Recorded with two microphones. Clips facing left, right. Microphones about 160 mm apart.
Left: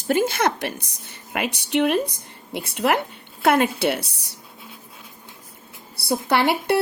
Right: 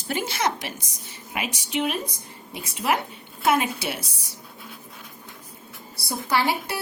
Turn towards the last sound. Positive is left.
turn(degrees=65)  # may be behind; listen again after turning